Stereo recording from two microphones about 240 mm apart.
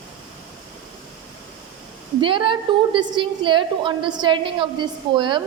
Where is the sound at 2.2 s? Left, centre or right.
Right.